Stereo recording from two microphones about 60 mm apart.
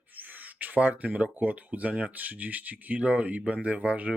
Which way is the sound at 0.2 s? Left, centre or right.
Right.